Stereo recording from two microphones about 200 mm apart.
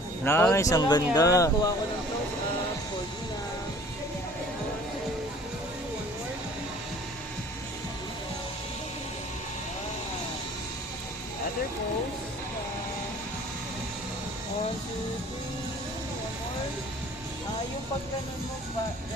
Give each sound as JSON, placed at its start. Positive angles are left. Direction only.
{"t": 0.3, "sound": "speech", "side_deg": 10}